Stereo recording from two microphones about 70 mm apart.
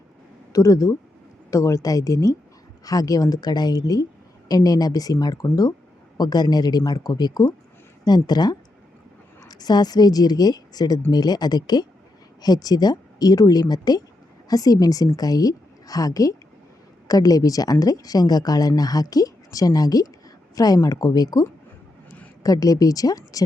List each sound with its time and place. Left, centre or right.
0.5 s a woman's voice: left
6.1 s a woman's voice: left
14.4 s a woman's voice: left
22.4 s speech: left